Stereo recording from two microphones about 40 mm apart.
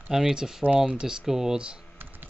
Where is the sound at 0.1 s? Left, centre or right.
Centre.